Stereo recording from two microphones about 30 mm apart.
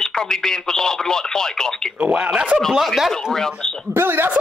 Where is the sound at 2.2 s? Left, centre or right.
Right.